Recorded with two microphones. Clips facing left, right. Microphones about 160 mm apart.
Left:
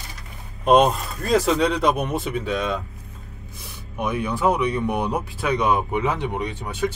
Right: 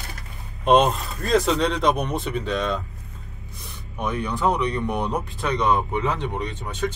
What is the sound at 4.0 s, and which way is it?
Speech, 15° left (ahead or behind).